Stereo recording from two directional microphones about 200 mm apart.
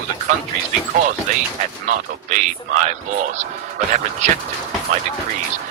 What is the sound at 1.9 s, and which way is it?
A man's voice, 40° right (ahead or behind).